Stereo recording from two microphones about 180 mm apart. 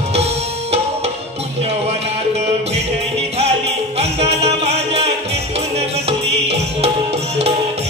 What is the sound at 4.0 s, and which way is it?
Music, 35° right (ahead or behind).